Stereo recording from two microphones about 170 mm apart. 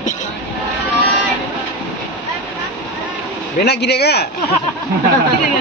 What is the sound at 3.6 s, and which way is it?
Speech, 75° left (ahead or behind).